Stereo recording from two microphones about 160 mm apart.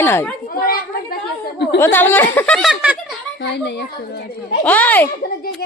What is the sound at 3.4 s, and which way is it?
Speech, 90° left.